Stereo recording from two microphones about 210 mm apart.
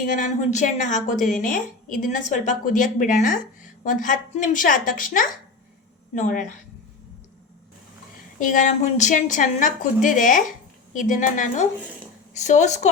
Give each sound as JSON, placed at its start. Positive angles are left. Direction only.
{"t": 0.0, "sound": "a woman's voice", "side_deg": 40}
{"t": 8.4, "sound": "a woman's voice", "side_deg": 40}